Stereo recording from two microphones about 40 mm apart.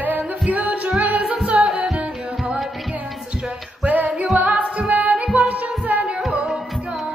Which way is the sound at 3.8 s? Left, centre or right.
Right.